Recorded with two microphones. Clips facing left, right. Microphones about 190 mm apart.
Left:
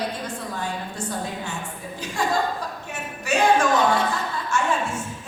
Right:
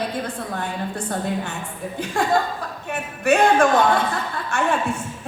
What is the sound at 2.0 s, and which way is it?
Speech, 55° right (ahead or behind).